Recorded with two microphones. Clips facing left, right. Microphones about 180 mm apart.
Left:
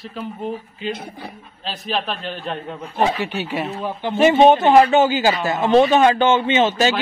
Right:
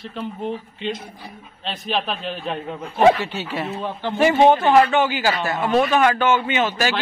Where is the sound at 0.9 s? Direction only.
60° left (ahead or behind).